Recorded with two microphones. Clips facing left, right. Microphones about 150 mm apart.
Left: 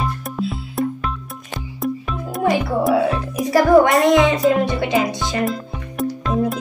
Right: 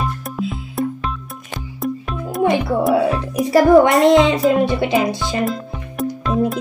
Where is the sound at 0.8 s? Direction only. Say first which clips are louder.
Even; centre (ahead or behind).